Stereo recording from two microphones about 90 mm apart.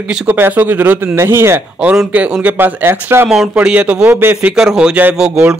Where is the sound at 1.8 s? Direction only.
15° right (ahead or behind).